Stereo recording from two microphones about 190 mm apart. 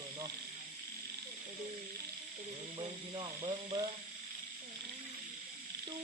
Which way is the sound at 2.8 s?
25° right (ahead or behind).